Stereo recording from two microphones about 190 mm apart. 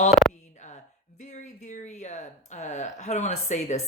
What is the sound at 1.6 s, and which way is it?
Speech, 40° left (ahead or behind).